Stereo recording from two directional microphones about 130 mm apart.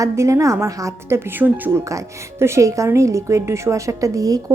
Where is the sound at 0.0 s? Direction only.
25° right (ahead or behind).